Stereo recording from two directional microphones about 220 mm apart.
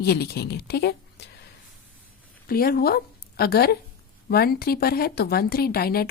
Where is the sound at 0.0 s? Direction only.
45° left (ahead or behind).